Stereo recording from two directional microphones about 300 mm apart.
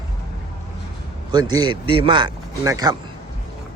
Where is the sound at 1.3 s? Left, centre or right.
Centre.